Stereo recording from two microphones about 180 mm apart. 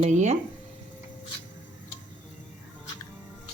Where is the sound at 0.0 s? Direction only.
40° right (ahead or behind).